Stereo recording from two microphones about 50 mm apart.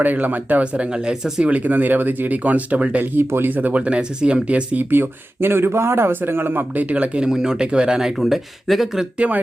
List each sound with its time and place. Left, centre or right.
0.0 s speech: right
0.6 s speech: right
1.5 s speech: right
3.0 s speech: right
3.5 s speech: right
4.8 s speech: right
7.2 s speech: centre
8.2 s speech: centre
9.1 s speech: right